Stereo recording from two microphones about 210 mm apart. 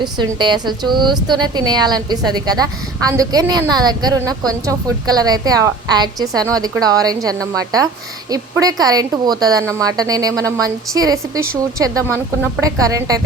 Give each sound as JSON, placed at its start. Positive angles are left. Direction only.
{"t": 0.0, "sound": "a woman's voice", "side_deg": -20}